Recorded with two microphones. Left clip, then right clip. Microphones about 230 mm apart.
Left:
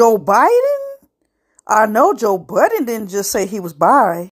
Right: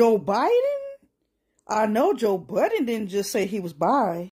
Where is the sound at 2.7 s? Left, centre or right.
Left.